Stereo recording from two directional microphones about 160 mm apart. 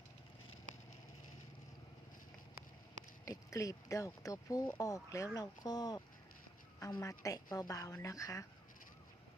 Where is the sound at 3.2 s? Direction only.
20° left (ahead or behind).